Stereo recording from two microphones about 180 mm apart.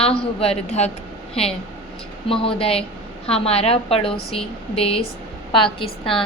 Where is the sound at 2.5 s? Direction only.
30° left (ahead or behind).